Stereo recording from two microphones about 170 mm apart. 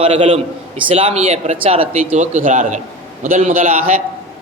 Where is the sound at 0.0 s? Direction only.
35° right (ahead or behind).